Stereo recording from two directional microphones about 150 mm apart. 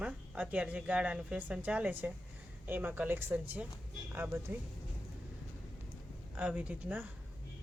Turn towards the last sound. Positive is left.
turn(degrees=-10)  # may be behind; listen again after turning